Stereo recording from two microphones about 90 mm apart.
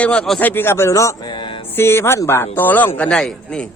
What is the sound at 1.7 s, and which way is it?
Speech, 25° left (ahead or behind).